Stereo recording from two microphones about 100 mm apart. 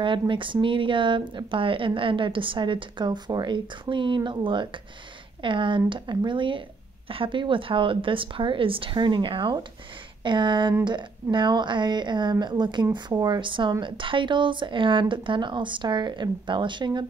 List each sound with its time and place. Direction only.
0.0 s a woman's voice: 55° right (ahead or behind)